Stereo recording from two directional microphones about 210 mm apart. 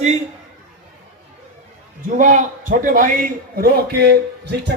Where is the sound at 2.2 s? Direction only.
35° right (ahead or behind).